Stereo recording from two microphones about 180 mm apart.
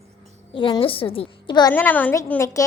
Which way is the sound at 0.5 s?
30° left (ahead or behind).